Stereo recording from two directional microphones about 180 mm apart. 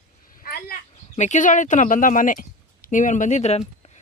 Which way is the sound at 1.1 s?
40° left (ahead or behind).